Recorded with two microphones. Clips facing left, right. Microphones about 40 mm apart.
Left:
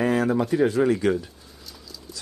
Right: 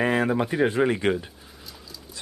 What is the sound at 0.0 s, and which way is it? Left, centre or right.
Speech, right.